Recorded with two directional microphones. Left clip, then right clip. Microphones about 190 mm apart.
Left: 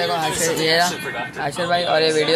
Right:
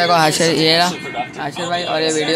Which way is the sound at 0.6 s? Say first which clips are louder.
Right 1 dB; 30° right (ahead or behind).